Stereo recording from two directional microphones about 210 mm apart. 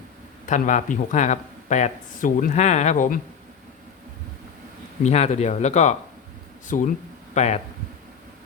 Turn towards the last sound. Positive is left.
turn(degrees=30)  # may be behind; listen again after turning